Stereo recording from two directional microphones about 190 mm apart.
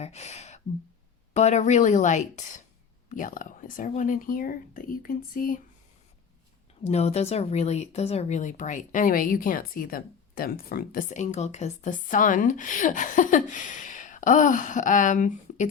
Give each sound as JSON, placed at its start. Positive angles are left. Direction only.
{"t": 0.0, "sound": "speech", "side_deg": 35}
{"t": 6.8, "sound": "speech", "side_deg": 35}